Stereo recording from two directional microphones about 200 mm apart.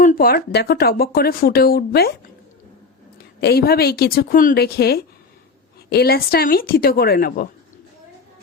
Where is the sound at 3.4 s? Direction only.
50° left (ahead or behind).